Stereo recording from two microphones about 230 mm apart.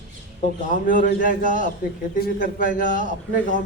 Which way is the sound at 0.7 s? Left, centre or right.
Left.